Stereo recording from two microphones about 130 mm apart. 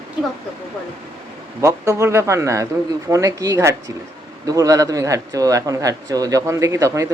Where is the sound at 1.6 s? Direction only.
20° right (ahead or behind).